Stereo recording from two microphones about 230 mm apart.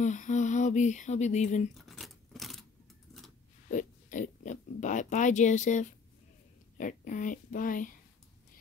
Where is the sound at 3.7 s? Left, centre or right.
Left.